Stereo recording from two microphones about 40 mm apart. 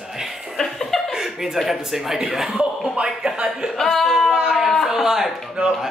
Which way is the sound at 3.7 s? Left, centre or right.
Centre.